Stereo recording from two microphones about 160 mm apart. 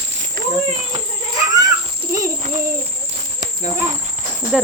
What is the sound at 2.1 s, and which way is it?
Speech, 15° right (ahead or behind).